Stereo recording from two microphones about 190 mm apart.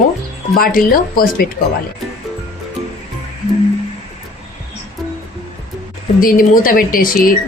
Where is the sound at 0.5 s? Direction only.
50° left (ahead or behind).